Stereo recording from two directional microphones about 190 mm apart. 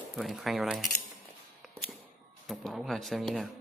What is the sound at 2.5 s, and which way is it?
Speech, centre (ahead or behind).